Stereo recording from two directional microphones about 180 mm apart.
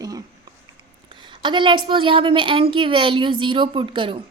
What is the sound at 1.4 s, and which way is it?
A woman's voice, 25° right (ahead or behind).